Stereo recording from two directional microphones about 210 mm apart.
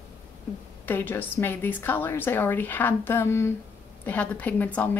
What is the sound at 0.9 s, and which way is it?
A woman's voice, 10° left (ahead or behind).